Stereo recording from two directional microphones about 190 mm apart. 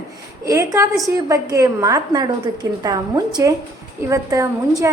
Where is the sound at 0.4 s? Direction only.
15° right (ahead or behind).